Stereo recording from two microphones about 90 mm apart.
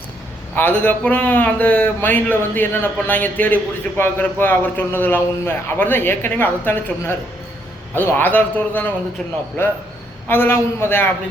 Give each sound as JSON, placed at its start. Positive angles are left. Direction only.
{"t": 0.5, "sound": "a man's voice", "side_deg": 20}